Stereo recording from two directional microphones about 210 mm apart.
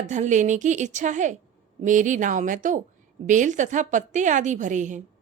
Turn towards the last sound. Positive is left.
turn(degrees=-35)  # may be behind; listen again after turning